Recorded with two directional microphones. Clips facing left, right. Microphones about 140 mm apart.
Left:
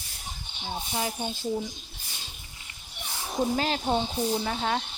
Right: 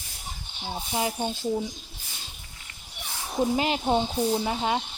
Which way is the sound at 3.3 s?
10° right (ahead or behind).